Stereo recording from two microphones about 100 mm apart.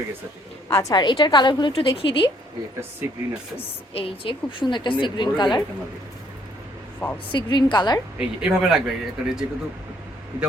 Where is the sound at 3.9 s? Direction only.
70° left (ahead or behind); by 5.6 s 50° left (ahead or behind).